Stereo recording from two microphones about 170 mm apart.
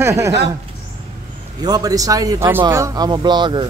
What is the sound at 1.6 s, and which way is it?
A man's voice, 20° right (ahead or behind).